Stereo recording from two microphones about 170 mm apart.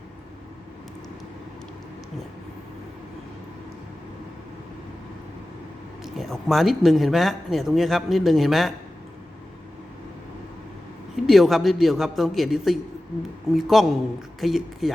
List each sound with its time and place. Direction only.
6.1 s speech: centre (ahead or behind)
11.3 s speech: centre (ahead or behind)